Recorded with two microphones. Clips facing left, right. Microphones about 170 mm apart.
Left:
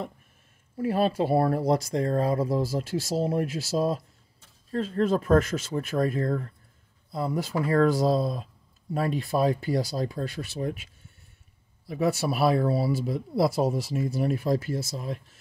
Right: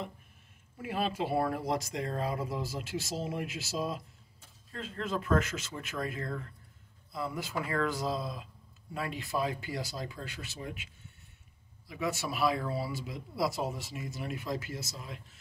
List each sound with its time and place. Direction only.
0.7 s speech: 35° left (ahead or behind)
11.9 s speech: 40° left (ahead or behind)